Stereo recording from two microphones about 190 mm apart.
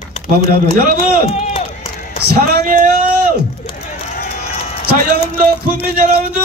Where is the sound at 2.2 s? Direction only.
55° right (ahead or behind).